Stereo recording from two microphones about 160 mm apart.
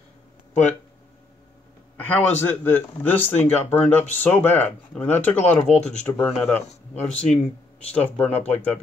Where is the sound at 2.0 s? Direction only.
10° left (ahead or behind).